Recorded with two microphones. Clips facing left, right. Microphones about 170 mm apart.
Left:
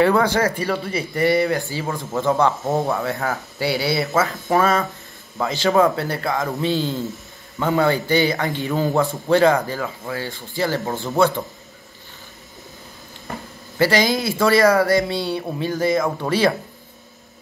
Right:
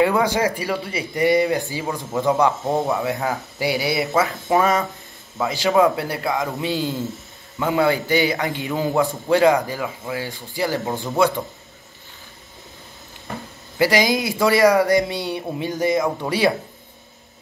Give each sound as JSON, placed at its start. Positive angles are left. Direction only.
{"t": 0.0, "sound": "a man's voice", "side_deg": -15}
{"t": 13.7, "sound": "a man's voice", "side_deg": -15}